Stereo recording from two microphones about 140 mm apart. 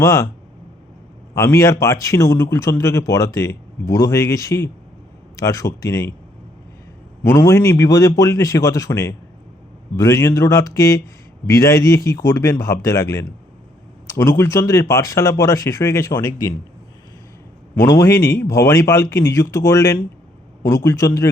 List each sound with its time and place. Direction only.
0.0 s speech: 20° left (ahead or behind)
1.4 s speech: 25° left (ahead or behind)
7.3 s speech: 20° left (ahead or behind)
17.7 s speech: 20° left (ahead or behind)